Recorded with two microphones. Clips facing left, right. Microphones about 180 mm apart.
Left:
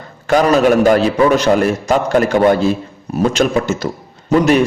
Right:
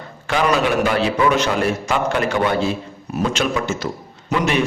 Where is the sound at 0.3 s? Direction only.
40° left (ahead or behind).